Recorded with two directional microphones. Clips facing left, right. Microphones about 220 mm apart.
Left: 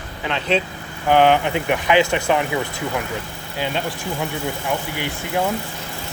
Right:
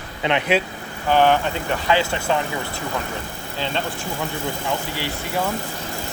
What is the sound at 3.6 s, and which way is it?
Speech, 10° left (ahead or behind).